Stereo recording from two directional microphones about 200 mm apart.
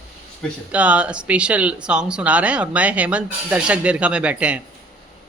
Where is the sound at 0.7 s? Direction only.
5° right (ahead or behind).